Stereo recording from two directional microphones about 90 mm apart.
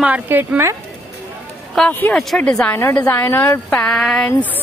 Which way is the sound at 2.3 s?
10° left (ahead or behind).